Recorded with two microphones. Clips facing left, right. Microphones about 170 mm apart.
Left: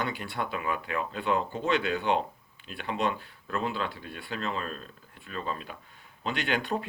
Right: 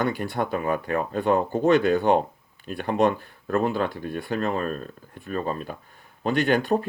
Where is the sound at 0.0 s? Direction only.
45° right (ahead or behind).